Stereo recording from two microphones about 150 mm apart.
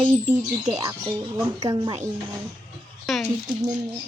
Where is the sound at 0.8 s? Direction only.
30° right (ahead or behind).